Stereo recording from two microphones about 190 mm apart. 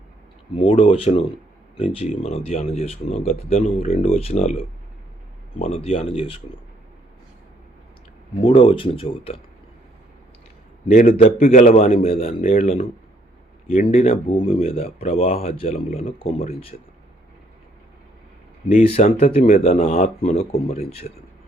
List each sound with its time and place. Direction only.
0.5 s speech: 30° left (ahead or behind)
8.4 s speech: 30° left (ahead or behind)
10.9 s a man's voice: 45° left (ahead or behind); by 16.7 s 30° left (ahead or behind)
18.7 s speech: 35° left (ahead or behind)